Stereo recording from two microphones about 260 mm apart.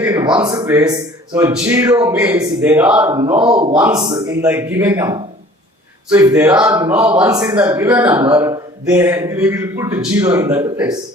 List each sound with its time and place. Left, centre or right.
0.0 s a sound: centre
0.4 s a man's voice: centre
3.2 s speech: centre
3.7 s a man's voice: centre